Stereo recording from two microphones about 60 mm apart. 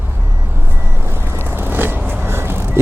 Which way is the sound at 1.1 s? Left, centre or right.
Right.